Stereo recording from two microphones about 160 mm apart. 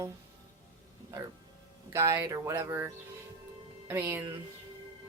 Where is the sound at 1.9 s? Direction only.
20° right (ahead or behind).